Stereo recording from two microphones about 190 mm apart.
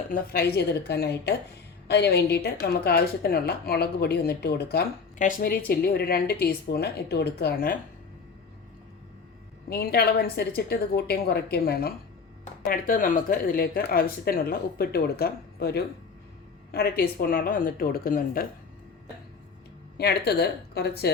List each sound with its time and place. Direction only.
0.1 s a woman's voice: 55° left (ahead or behind)
5.1 s a woman's voice: 45° left (ahead or behind)
9.6 s a woman's voice: 55° left (ahead or behind)
20.0 s a woman's voice: 55° left (ahead or behind)